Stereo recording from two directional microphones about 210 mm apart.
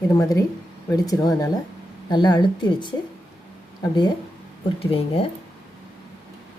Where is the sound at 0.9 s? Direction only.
20° left (ahead or behind).